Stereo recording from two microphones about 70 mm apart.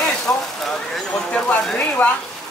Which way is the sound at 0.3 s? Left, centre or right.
Left.